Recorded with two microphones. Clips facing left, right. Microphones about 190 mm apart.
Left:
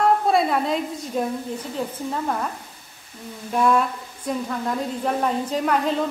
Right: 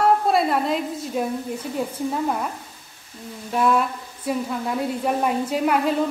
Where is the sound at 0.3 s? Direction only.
Centre (ahead or behind).